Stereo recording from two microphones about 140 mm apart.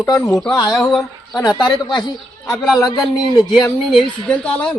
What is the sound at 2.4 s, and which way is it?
Speech, centre (ahead or behind).